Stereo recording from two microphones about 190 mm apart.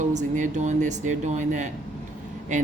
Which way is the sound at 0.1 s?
40° right (ahead or behind).